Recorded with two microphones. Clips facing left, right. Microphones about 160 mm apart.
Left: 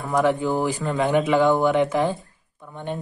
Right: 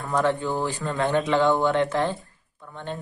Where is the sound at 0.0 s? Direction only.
15° left (ahead or behind).